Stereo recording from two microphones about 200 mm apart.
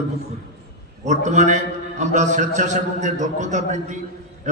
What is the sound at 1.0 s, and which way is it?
A man's voice, 35° right (ahead or behind).